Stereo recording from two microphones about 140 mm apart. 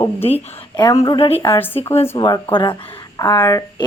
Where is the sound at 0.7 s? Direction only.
25° left (ahead or behind).